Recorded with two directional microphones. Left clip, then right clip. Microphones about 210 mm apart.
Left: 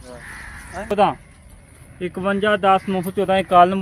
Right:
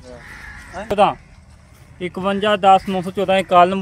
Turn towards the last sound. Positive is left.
turn(degrees=-45)  # may be behind; listen again after turning